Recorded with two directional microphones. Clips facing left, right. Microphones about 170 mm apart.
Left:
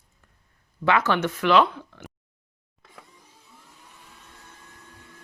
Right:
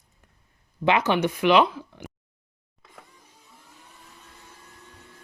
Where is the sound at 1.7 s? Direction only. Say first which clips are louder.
Right 2 dB; 10° right (ahead or behind).